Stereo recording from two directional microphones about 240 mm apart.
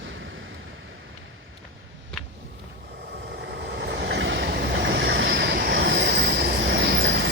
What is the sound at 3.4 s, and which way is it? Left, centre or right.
Vehicle, right.